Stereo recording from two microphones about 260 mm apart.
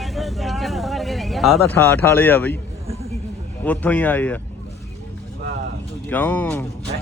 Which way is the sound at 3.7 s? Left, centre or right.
Centre.